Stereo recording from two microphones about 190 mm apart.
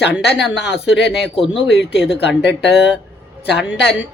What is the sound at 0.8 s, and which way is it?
Speech, 70° left (ahead or behind).